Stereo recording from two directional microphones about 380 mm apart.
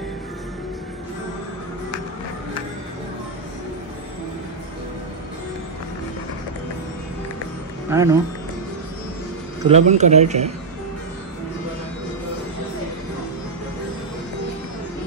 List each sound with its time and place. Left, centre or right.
7.9 s speech: centre
9.7 s speech: centre